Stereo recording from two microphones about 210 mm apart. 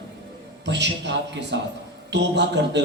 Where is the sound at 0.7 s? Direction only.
55° right (ahead or behind).